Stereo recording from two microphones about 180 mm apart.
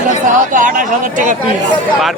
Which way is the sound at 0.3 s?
45° right (ahead or behind).